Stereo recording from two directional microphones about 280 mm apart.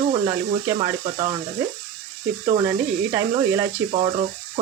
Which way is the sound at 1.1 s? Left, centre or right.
Right.